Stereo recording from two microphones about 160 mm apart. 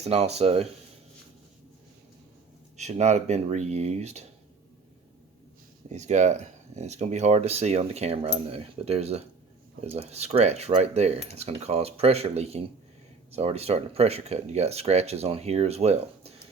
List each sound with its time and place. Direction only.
0.0 s speech: 40° right (ahead or behind)
2.7 s speech: 45° right (ahead or behind)
5.9 s speech: 45° right (ahead or behind)